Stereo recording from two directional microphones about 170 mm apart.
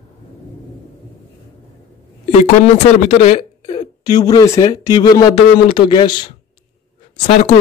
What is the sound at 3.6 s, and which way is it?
Speech, 25° left (ahead or behind).